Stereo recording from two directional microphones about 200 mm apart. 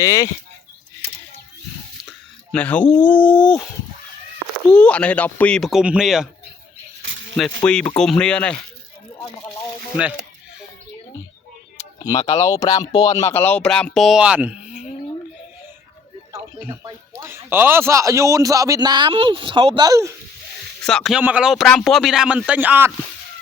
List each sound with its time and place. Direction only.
0.0 s speech: 15° left (ahead or behind)
2.5 s speech: 5° left (ahead or behind)
4.7 s speech: 5° left (ahead or behind)
7.3 s speech: 5° left (ahead or behind)
11.8 s tick: 20° left (ahead or behind)
12.4 s speech: 15° left (ahead or behind); by 14.7 s 5° right (ahead or behind)
16.3 s speech: 15° right (ahead or behind)
20.8 s speech: centre (ahead or behind)